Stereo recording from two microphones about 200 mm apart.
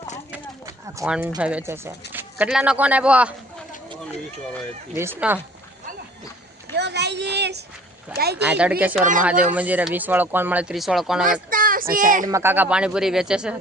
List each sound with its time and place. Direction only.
0.3 s a sound: 10° right (ahead or behind)
1.0 s speech: 5° right (ahead or behind)
4.9 s speech: 10° right (ahead or behind)
6.7 s a sound: 55° right (ahead or behind)
8.1 s speech: 50° right (ahead or behind)
8.4 s speech: 5° right (ahead or behind)
11.4 s child singing: 45° right (ahead or behind)
12.2 s speech: 15° right (ahead or behind)